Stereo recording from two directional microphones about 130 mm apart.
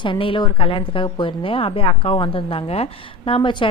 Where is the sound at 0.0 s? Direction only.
40° left (ahead or behind).